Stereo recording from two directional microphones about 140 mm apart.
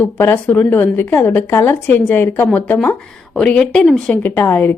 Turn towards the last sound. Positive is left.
turn(degrees=15)  # may be behind; listen again after turning